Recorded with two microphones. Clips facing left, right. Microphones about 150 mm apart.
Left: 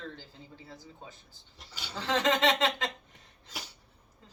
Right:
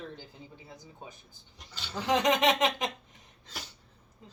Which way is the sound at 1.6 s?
10° left (ahead or behind).